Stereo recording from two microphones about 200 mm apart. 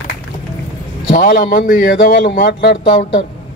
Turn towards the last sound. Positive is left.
turn(degrees=50)  # may be behind; listen again after turning